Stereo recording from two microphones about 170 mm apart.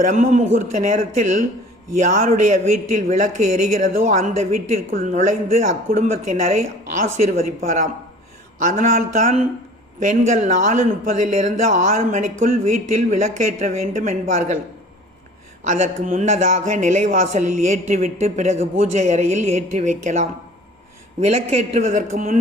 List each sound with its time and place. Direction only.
0.0 s speech: 45° right (ahead or behind)
15.6 s speech: 45° right (ahead or behind)